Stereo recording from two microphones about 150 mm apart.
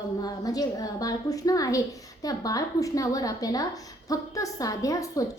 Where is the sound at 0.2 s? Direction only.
25° left (ahead or behind).